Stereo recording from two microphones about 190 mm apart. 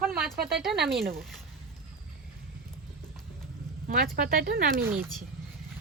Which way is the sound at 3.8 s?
50° right (ahead or behind).